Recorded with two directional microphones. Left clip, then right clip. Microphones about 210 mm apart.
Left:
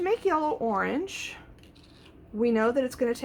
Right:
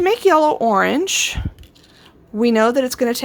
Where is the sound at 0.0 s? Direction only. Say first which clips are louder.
Right 12 dB; 45° right (ahead or behind).